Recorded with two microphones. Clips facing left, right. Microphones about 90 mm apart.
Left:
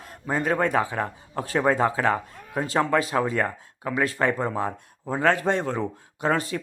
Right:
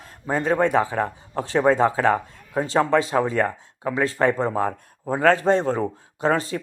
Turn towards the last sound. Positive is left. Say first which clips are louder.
# right 3 dB
turn(degrees=-30)  # may be behind; listen again after turning